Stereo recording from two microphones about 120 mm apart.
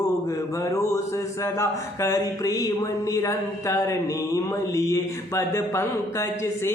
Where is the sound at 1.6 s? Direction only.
25° left (ahead or behind).